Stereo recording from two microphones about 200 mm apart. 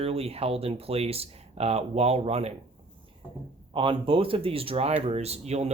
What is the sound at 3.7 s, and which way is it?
Speech, 25° right (ahead or behind).